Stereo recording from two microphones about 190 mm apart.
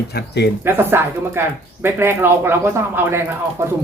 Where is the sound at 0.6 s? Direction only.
10° right (ahead or behind).